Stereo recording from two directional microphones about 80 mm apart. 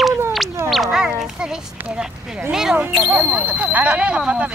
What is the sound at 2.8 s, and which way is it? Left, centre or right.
Speech, centre.